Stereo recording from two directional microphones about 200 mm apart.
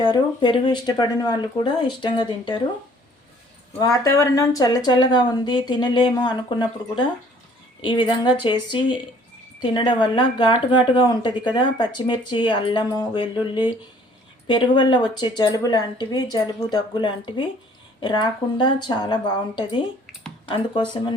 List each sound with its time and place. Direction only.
0.0 s speech: 25° left (ahead or behind)
3.8 s speech: 15° left (ahead or behind)